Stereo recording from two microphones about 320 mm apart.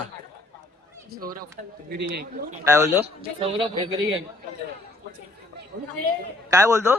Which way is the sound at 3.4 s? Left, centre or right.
Centre.